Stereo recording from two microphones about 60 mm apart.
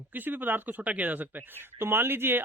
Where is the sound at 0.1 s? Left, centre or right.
Right.